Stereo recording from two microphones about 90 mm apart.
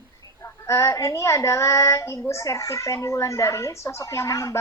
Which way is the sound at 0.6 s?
35° left (ahead or behind).